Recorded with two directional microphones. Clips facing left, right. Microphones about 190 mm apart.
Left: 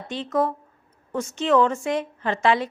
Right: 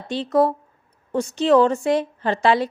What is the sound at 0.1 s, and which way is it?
Speech, 35° right (ahead or behind).